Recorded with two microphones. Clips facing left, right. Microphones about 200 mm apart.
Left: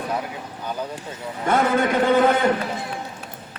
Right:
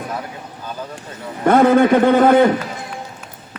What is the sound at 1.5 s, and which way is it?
A man's voice, 55° right (ahead or behind).